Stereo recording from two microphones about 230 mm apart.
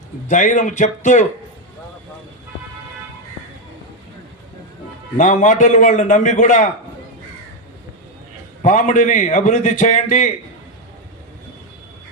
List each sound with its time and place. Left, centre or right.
0.3 s a man's voice: left
5.1 s a man's voice: left
8.6 s a man's voice: left